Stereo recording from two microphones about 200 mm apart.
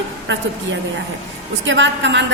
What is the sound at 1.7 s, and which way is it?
Speech, 65° right (ahead or behind).